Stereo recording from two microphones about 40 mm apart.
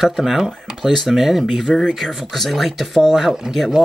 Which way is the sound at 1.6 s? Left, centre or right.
Centre.